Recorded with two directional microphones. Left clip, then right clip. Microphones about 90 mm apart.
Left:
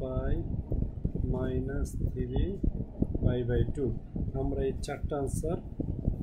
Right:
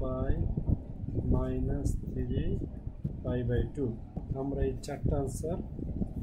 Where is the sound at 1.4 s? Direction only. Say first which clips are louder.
Left 1 dB; 30° left (ahead or behind).